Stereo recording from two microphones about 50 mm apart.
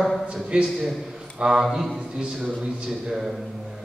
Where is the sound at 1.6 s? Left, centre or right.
Centre.